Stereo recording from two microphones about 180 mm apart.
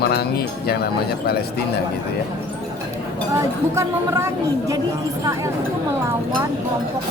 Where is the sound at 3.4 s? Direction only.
15° right (ahead or behind).